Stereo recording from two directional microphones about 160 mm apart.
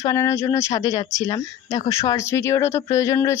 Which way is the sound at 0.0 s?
20° left (ahead or behind).